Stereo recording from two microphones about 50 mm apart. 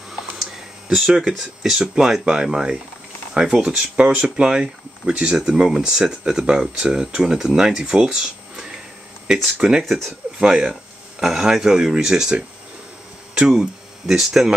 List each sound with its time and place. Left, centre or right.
0.9 s speech: centre
9.8 s speech: centre
10.4 s speech: centre